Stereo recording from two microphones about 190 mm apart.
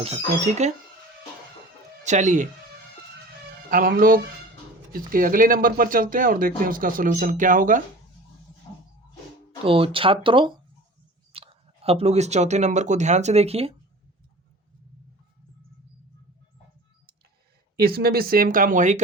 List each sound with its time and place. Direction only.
0.4 s speech: 35° right (ahead or behind)
2.0 s speech: 40° right (ahead or behind)
3.7 s speech: 45° right (ahead or behind)
9.6 s speech: 30° right (ahead or behind)
17.7 s speech: 55° right (ahead or behind)